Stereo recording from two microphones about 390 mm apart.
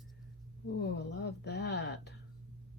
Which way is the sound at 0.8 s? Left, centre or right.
Left.